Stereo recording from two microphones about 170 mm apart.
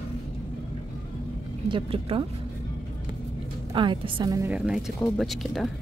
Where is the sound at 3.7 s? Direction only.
30° right (ahead or behind).